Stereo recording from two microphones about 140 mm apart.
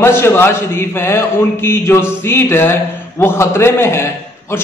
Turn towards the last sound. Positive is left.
turn(degrees=20)  # may be behind; listen again after turning